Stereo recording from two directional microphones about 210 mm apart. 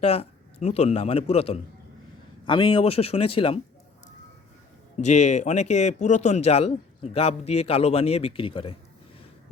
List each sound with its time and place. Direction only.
0.0 s a man's voice: 30° left (ahead or behind)
4.9 s speech: 35° left (ahead or behind)